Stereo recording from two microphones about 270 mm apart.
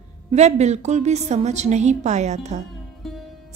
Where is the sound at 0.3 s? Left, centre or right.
Right.